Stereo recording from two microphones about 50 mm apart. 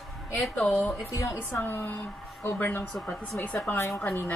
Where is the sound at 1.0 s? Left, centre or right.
Left.